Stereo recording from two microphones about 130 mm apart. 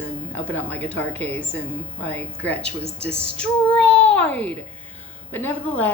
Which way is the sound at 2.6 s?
50° right (ahead or behind).